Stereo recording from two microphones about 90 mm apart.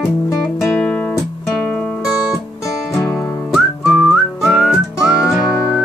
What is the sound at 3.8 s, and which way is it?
Whistling, 10° right (ahead or behind).